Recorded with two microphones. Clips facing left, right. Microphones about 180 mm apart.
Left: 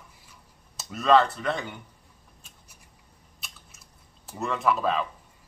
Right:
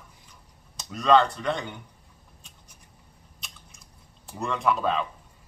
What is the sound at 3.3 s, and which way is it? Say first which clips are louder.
Biting: even; 5° left (ahead or behind).